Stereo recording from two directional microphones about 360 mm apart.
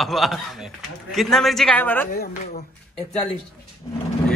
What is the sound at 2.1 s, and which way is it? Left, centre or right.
Speech, left.